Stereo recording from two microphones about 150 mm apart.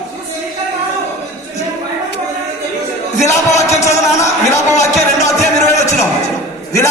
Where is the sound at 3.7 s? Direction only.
50° left (ahead or behind).